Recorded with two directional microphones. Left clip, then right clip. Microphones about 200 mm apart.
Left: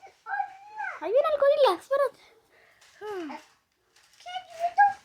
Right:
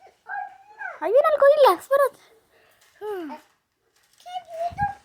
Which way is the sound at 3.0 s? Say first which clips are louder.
Right 4 dB; 10° right (ahead or behind).